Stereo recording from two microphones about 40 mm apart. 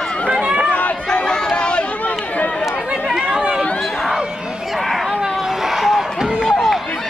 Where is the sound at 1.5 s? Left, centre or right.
Left.